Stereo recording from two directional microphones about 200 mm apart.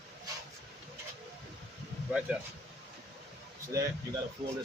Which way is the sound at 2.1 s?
5° right (ahead or behind).